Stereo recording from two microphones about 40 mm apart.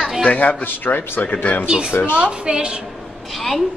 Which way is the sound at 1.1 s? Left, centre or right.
Left.